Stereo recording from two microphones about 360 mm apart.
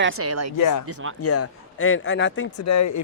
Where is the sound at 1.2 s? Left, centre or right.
Left.